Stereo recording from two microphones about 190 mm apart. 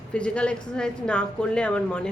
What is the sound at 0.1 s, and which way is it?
Speech, 5° left (ahead or behind).